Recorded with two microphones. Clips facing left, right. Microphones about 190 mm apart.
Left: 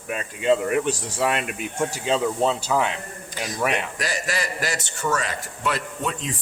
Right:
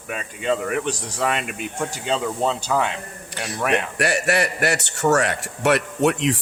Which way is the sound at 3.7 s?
65° right (ahead or behind).